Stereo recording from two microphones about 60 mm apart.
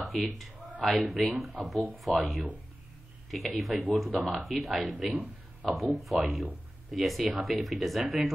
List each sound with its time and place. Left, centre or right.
0.1 s speech: centre
5.1 s a sound: right
5.7 s speech: centre